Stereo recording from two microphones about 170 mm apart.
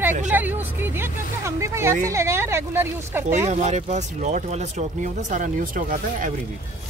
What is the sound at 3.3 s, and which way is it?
Speech, 40° right (ahead or behind).